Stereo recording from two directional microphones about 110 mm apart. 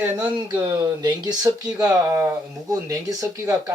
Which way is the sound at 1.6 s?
10° right (ahead or behind).